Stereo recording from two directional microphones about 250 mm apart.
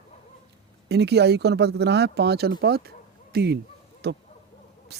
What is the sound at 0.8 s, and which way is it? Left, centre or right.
Speech, right.